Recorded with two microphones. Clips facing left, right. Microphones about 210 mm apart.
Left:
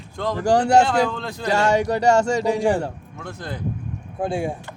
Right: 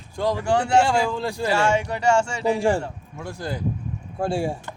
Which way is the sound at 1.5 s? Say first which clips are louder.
Left 4 dB; 40° left (ahead or behind).